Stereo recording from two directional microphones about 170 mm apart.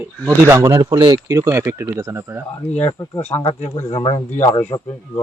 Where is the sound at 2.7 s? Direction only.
40° left (ahead or behind).